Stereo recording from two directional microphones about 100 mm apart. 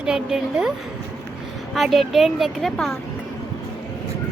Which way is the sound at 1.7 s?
Centre (ahead or behind).